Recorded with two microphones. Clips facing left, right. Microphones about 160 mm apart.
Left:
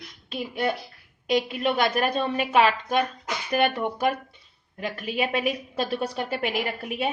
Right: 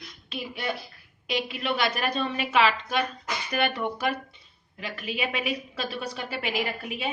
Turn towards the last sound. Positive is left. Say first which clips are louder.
# left 2 dB
turn(degrees=50)  # may be behind; listen again after turning